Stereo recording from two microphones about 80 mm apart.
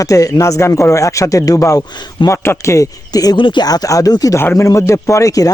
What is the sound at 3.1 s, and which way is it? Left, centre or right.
Speech, left.